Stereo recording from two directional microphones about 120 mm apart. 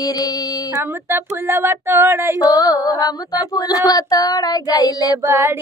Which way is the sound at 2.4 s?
30° left (ahead or behind).